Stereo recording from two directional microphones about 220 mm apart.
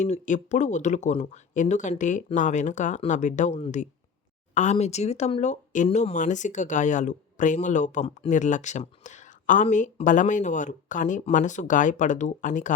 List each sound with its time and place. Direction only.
0.0 s speech: 35° left (ahead or behind)